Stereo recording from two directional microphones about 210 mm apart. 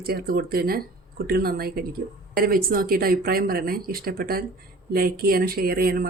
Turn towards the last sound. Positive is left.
turn(degrees=-45)  # may be behind; listen again after turning